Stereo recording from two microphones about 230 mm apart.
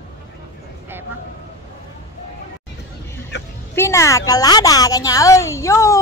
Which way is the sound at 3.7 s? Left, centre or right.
Centre.